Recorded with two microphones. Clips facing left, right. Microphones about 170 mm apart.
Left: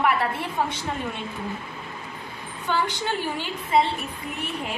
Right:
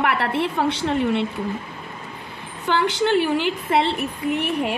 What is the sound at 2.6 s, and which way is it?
A woman's voice, 75° right (ahead or behind).